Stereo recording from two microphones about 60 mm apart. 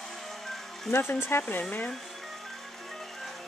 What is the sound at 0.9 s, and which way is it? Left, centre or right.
Speech, left.